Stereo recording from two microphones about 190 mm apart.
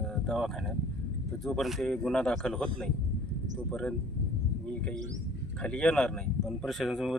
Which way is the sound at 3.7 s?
5° left (ahead or behind).